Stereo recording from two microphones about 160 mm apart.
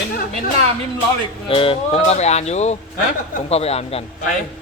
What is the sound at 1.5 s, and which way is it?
Speech, 35° left (ahead or behind).